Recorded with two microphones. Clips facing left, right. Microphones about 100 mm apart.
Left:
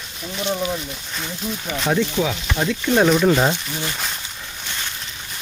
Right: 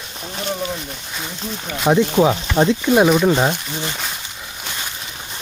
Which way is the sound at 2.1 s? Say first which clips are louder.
Right 7 dB; 40° right (ahead or behind).